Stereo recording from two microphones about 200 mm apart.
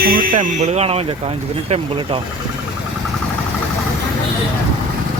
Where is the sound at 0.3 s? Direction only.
30° right (ahead or behind).